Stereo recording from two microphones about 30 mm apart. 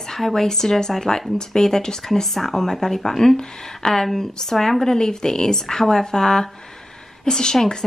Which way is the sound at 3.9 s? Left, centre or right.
Centre.